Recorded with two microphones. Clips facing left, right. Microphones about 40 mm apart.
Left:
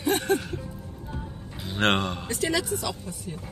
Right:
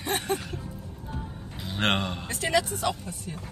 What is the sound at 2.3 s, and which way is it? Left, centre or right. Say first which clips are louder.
Speech: right 2 dB; right.